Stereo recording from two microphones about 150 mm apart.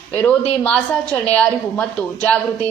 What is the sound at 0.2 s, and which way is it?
A woman's voice, 5° left (ahead or behind).